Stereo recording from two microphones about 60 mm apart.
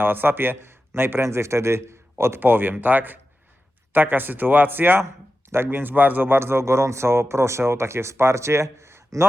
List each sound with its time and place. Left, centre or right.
0.0 s a man's voice: right
2.4 s speech: right
5.0 s a sound: right
5.6 s speech: right